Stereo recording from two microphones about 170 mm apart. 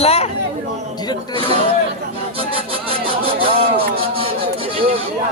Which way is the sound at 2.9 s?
35° right (ahead or behind).